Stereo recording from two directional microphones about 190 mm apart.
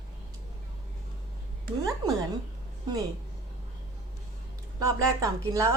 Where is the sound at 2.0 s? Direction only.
25° right (ahead or behind).